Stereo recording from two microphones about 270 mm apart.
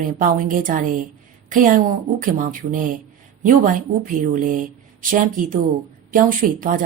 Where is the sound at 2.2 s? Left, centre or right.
Right.